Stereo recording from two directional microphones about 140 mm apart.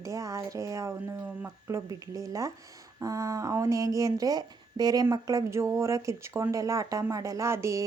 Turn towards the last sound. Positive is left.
turn(degrees=-20)  # may be behind; listen again after turning